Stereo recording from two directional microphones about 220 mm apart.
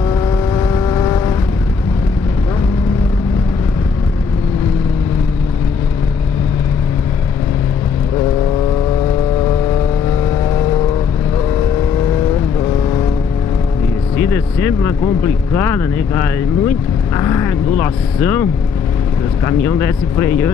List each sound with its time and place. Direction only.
0.1 s vehicle: 20° left (ahead or behind)
14.1 s speech: 10° left (ahead or behind)